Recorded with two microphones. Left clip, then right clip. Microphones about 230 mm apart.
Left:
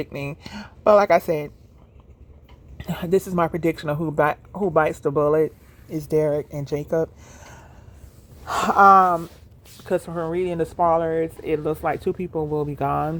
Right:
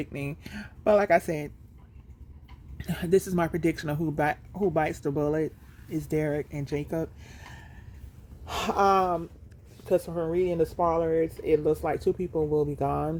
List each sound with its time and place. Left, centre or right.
0.0 s speech: centre
2.7 s speech: centre
8.4 s speech: left
12.3 s speech: left
12.5 s speech: left